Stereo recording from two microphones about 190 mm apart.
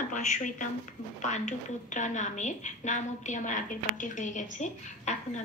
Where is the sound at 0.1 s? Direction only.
40° left (ahead or behind).